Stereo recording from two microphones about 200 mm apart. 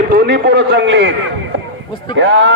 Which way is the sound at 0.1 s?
55° right (ahead or behind).